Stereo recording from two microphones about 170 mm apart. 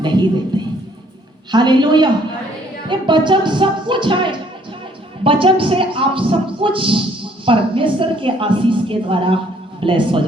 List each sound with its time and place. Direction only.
0.0 s a man's voice: 25° right (ahead or behind)
1.5 s music: 25° right (ahead or behind)
5.2 s a woman's voice: 30° right (ahead or behind)
9.8 s music: 30° right (ahead or behind)